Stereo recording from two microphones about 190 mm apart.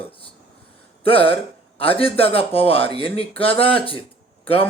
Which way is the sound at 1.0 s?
30° left (ahead or behind).